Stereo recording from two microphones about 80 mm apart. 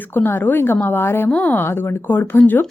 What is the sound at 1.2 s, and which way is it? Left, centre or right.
Speech, centre.